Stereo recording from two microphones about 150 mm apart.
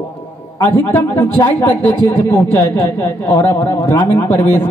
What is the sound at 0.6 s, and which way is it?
A man's voice, 15° left (ahead or behind).